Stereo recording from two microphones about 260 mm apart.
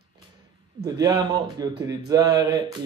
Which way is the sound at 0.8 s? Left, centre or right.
Centre.